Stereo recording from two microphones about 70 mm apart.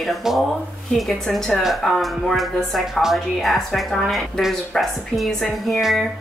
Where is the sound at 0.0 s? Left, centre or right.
Centre.